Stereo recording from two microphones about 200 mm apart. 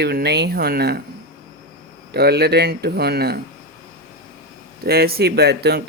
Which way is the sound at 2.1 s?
55° right (ahead or behind).